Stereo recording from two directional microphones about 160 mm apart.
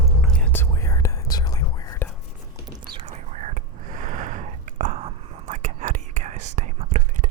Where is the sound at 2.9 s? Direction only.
45° right (ahead or behind).